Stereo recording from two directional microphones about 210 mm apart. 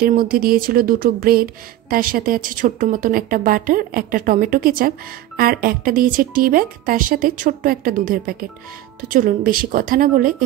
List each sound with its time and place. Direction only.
0.0 s speech: 45° right (ahead or behind)